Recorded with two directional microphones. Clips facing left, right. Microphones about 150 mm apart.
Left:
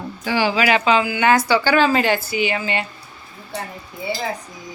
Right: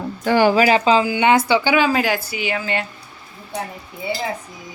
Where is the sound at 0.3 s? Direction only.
50° right (ahead or behind); by 2.8 s centre (ahead or behind).